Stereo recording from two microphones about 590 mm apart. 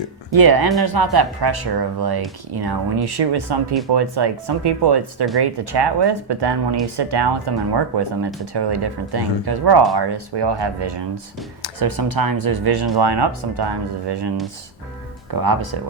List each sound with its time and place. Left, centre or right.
0.3 s speech: right